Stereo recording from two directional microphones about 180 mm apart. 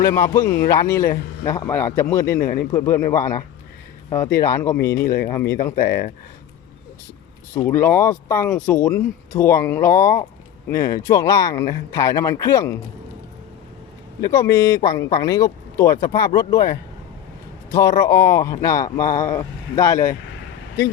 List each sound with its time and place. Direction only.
0.0 s speech: 15° left (ahead or behind)
2.4 s speech: 55° left (ahead or behind)
2.7 s speech: 15° left (ahead or behind)
5.0 s speech: 55° left (ahead or behind)
5.3 s speech: 15° left (ahead or behind)
7.6 s speech: 10° left (ahead or behind)
14.3 s speech: 15° left (ahead or behind)